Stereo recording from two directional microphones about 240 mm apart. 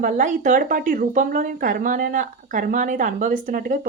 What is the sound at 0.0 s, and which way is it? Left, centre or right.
Speech, right.